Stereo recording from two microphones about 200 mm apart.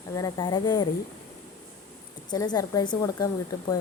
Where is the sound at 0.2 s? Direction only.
20° left (ahead or behind).